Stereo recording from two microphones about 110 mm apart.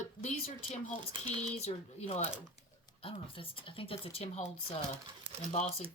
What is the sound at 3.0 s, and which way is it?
A woman's voice, 55° left (ahead or behind).